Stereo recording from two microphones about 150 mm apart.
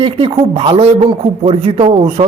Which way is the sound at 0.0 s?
40° right (ahead or behind).